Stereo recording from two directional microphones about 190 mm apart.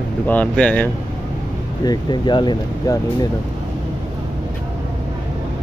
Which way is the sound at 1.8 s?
20° left (ahead or behind).